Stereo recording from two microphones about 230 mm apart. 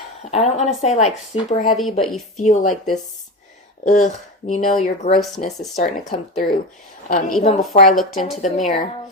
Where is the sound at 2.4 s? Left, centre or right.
Left.